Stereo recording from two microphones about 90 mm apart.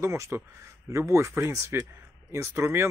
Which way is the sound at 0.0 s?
30° right (ahead or behind).